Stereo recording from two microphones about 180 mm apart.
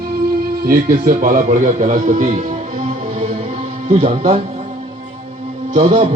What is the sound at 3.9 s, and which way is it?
Speech, 40° right (ahead or behind).